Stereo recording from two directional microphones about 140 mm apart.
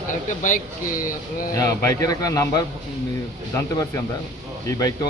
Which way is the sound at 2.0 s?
25° left (ahead or behind).